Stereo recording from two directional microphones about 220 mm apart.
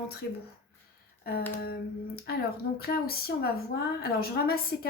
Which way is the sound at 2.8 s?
45° left (ahead or behind).